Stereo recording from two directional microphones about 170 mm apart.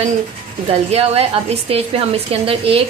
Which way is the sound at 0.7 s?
35° right (ahead or behind).